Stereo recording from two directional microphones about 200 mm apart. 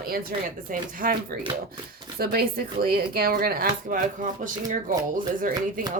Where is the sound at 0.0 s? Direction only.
45° right (ahead or behind).